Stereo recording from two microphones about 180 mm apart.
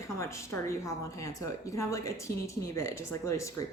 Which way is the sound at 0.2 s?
15° left (ahead or behind).